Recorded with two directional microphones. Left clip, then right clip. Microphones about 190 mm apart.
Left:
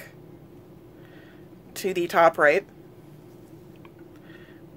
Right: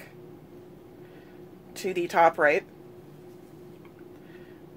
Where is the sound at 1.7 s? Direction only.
35° left (ahead or behind).